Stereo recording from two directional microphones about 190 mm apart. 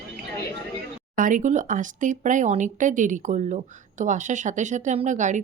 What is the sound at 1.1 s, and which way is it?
Speech, 45° right (ahead or behind).